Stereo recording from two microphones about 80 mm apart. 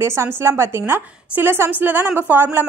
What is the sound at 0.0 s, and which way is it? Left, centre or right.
A woman's voice, right.